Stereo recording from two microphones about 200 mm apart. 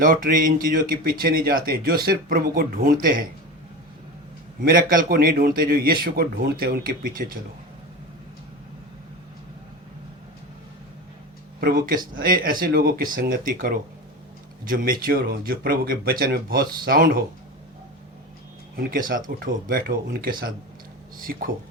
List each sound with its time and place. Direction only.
0.0 s speech: 45° right (ahead or behind)
4.6 s speech: 45° right (ahead or behind)
11.6 s speech: 45° right (ahead or behind)
18.8 s speech: 45° right (ahead or behind)